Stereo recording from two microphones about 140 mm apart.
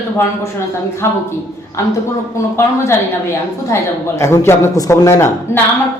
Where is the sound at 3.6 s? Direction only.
20° left (ahead or behind).